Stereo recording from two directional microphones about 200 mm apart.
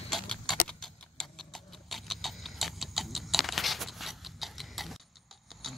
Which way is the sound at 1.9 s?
Centre (ahead or behind).